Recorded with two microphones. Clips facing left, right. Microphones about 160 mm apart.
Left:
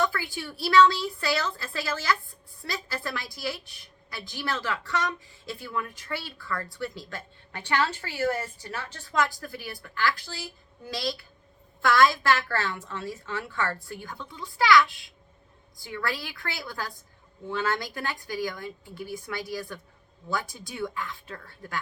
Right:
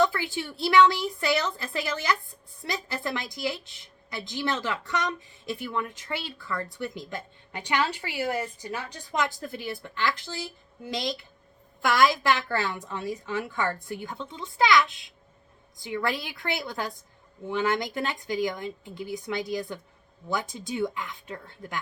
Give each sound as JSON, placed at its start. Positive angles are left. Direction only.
{"t": 0.0, "sound": "a woman's voice", "side_deg": -20}